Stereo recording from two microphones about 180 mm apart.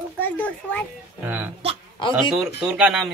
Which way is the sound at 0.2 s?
10° left (ahead or behind).